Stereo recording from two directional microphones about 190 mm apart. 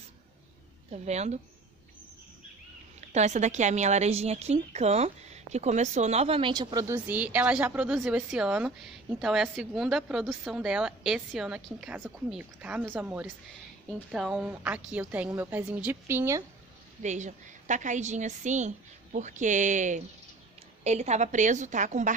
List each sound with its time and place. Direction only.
1.0 s a woman's voice: 35° right (ahead or behind)
3.0 s a woman's voice: 35° right (ahead or behind); by 16.4 s 15° right (ahead or behind)
17.0 s a woman's voice: 40° right (ahead or behind)